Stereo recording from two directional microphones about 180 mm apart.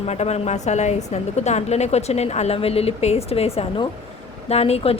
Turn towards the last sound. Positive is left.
turn(degrees=35)  # may be behind; listen again after turning